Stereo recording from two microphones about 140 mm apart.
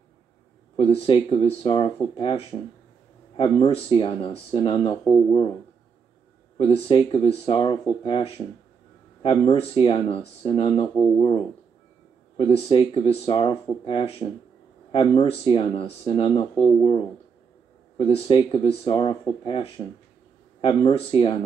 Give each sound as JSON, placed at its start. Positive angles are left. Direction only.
{"t": 0.7, "sound": "speech", "side_deg": 40}
{"t": 6.6, "sound": "speech", "side_deg": 35}